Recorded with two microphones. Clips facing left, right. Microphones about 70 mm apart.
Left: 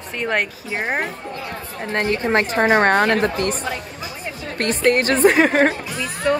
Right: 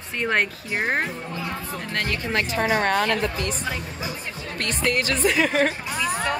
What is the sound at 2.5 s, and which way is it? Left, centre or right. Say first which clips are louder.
A woman's voice: left 6 dB; left.